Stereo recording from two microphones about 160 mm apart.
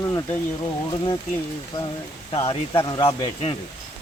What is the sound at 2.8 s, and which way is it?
Speech, 30° left (ahead or behind).